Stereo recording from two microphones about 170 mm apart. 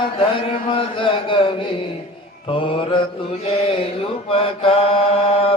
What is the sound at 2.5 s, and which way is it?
Mantra, 30° left (ahead or behind).